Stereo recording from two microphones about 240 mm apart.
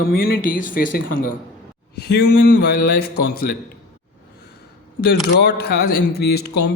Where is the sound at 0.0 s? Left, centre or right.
Left.